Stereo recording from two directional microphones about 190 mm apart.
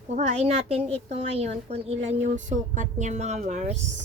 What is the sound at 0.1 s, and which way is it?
A woman's voice, 35° right (ahead or behind).